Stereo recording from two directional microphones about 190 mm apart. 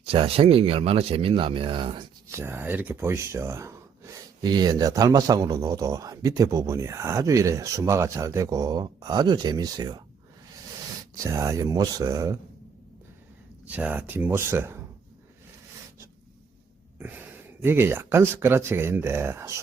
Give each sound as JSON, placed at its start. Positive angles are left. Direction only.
{"t": 0.0, "sound": "speech", "side_deg": -30}
{"t": 2.3, "sound": "speech", "side_deg": -10}
{"t": 11.2, "sound": "speech", "side_deg": -15}
{"t": 13.7, "sound": "speech", "side_deg": -10}
{"t": 17.0, "sound": "speech", "side_deg": -10}